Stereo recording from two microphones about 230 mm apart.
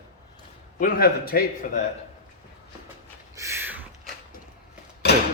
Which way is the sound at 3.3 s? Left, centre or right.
Centre.